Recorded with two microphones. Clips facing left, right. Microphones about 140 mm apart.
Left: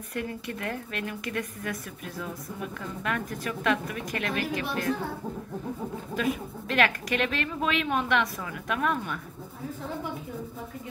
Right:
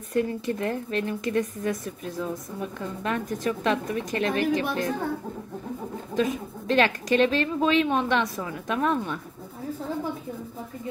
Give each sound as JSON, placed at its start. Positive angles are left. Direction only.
{"t": 0.1, "sound": "a woman's voice", "side_deg": -30}
{"t": 6.1, "sound": "a woman's voice", "side_deg": -30}